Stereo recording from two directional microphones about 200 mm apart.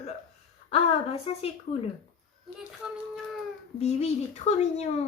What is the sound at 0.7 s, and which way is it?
Speech, 30° left (ahead or behind).